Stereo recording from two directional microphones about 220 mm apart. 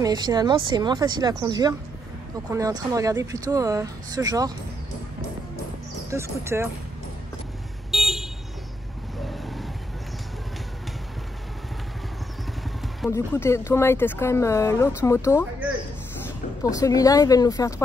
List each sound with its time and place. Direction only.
0.0 s speech: 20° right (ahead or behind)
6.0 s speech: 10° right (ahead or behind)
7.9 s vehicle: centre (ahead or behind)
13.1 s speech: 10° left (ahead or behind)
16.7 s speech: 15° left (ahead or behind)